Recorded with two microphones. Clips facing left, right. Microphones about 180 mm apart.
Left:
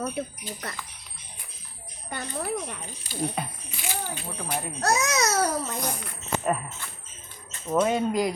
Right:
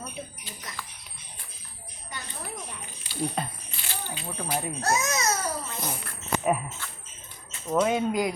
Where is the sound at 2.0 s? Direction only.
60° left (ahead or behind).